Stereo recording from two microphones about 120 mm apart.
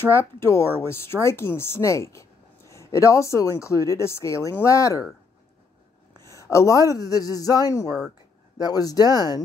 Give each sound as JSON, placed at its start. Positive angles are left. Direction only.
{"t": 0.1, "sound": "speech", "side_deg": 20}
{"t": 6.3, "sound": "speech", "side_deg": 25}